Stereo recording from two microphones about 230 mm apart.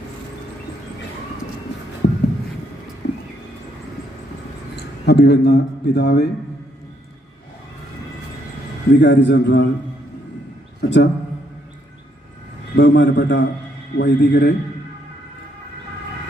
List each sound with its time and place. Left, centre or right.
2.0 s a sound: left
3.0 s horse: left
5.0 s a man's voice: left
9.0 s a man's voice: left
10.8 s a man's voice: left
12.7 s a man's voice: left